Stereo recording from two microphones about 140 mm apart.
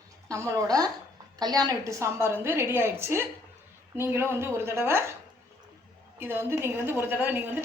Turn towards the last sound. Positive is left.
turn(degrees=-15)  # may be behind; listen again after turning